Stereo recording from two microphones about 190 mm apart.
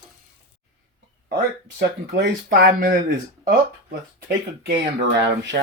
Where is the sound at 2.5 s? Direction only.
55° right (ahead or behind).